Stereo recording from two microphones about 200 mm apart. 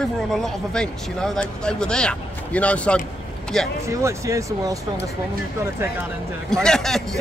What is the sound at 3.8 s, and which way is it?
Speech, 15° right (ahead or behind).